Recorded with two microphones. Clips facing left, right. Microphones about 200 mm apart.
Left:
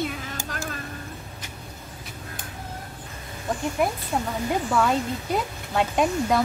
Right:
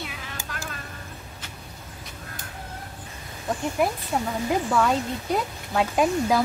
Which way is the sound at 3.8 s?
Centre (ahead or behind).